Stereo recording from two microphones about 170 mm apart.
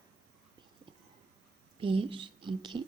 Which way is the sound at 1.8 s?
30° right (ahead or behind).